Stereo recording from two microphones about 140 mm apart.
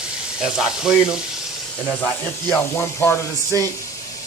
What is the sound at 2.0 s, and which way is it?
Speech, 10° left (ahead or behind).